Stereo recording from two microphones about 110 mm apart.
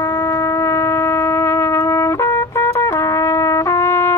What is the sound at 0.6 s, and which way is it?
Music, 25° left (ahead or behind).